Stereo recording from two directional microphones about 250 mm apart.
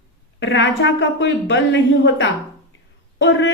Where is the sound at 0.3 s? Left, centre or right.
Left.